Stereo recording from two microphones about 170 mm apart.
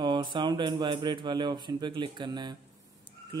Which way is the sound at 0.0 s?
25° right (ahead or behind).